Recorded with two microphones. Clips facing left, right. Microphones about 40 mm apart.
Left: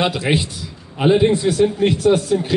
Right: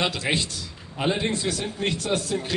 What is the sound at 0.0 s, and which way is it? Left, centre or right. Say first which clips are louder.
Speech: left 6 dB; centre.